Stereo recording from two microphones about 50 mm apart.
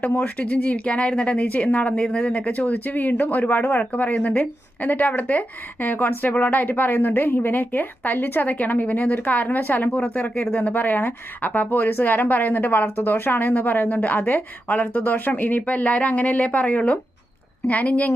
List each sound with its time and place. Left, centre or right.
0.0 s speech: left